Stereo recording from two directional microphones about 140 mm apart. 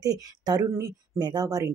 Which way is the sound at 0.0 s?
25° right (ahead or behind).